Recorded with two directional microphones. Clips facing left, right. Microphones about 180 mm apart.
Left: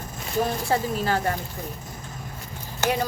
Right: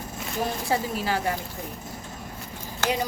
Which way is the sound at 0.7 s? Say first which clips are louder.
Left 2 dB; 10° right (ahead or behind).